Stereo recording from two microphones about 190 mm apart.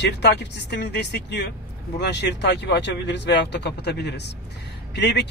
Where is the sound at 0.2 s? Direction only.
65° left (ahead or behind).